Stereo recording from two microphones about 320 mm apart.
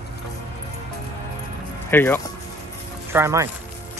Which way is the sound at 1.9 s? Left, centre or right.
Centre.